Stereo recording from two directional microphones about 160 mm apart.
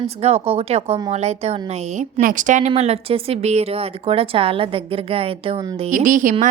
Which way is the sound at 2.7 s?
40° right (ahead or behind).